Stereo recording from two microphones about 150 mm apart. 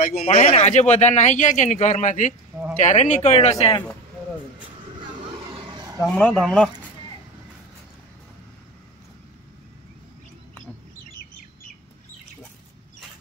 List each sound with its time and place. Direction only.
0.0 s speech: 75° left (ahead or behind)
0.3 s speech: 45° left (ahead or behind)
6.1 s speech: 5° left (ahead or behind)